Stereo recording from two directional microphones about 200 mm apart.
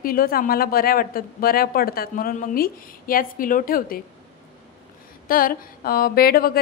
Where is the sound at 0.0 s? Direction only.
45° left (ahead or behind).